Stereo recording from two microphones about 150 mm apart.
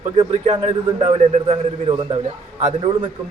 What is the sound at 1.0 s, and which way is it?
A man's voice, 40° right (ahead or behind).